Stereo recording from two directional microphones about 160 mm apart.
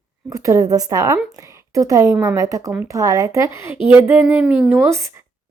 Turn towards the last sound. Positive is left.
turn(degrees=-15)  # may be behind; listen again after turning